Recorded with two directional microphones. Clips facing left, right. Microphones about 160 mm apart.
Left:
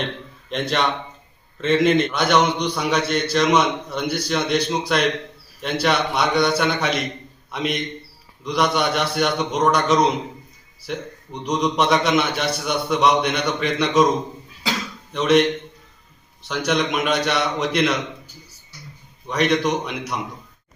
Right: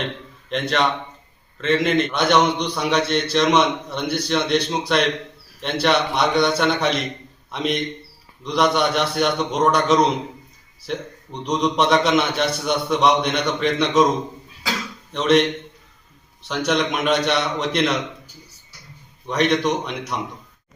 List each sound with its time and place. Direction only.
0.5 s a man's voice: centre (ahead or behind)
5.8 s a man's voice: centre (ahead or behind)
15.1 s a man's voice: centre (ahead or behind)
19.3 s a man's voice: centre (ahead or behind)